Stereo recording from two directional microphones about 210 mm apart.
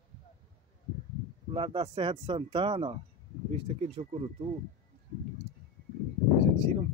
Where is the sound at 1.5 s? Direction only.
25° right (ahead or behind).